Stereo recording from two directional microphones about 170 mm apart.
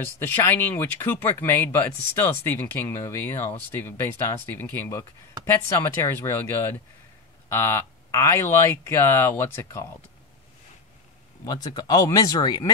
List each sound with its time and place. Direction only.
0.2 s speech: 15° left (ahead or behind)
11.4 s speech: 25° left (ahead or behind)